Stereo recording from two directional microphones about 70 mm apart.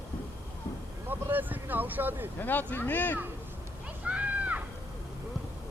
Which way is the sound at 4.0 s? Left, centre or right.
Centre.